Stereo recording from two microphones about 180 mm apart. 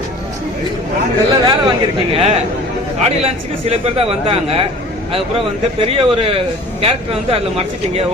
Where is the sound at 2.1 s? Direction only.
35° right (ahead or behind).